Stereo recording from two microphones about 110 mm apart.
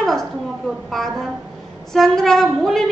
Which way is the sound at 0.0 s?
5° left (ahead or behind).